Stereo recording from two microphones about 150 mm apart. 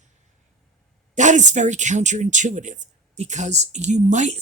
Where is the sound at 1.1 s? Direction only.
55° right (ahead or behind).